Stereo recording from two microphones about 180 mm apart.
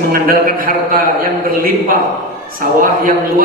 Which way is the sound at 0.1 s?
55° right (ahead or behind).